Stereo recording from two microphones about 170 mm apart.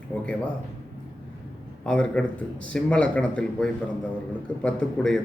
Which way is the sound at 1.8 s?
5° left (ahead or behind).